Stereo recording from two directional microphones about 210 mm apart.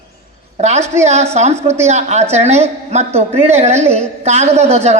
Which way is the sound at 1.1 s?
30° right (ahead or behind).